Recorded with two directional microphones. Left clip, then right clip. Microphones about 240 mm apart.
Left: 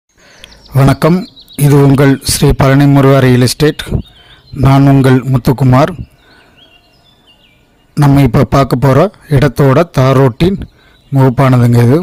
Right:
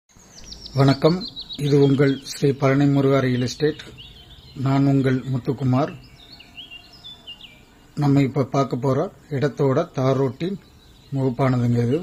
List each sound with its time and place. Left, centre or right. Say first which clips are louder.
0.7 s speech: left 8 dB; left
7.9 s speech: left 11 dB; left